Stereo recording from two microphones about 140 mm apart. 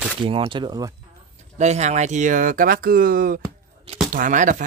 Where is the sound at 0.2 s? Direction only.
40° right (ahead or behind).